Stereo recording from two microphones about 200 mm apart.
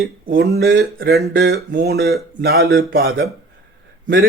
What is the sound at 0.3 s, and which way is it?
Speech, 50° right (ahead or behind).